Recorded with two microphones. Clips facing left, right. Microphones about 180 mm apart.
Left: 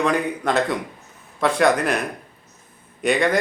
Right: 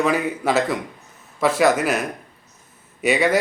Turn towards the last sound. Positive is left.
turn(degrees=-5)  # may be behind; listen again after turning